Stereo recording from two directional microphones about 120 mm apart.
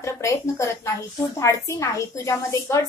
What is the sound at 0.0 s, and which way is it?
A woman's voice, 25° left (ahead or behind).